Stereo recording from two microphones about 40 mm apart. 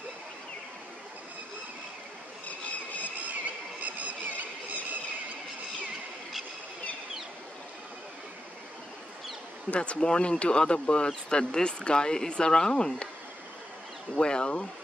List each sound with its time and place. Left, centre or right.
3.3 s a sound: right
9.7 s speech: left
14.1 s speech: left